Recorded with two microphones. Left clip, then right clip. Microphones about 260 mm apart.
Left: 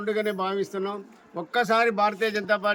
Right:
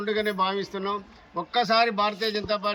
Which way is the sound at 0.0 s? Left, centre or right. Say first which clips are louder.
Right 1 dB; centre.